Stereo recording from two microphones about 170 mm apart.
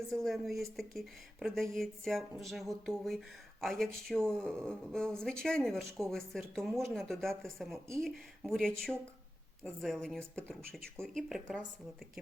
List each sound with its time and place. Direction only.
0.1 s speech: centre (ahead or behind)
10.6 s speech: 60° right (ahead or behind)
11.0 s speech: centre (ahead or behind)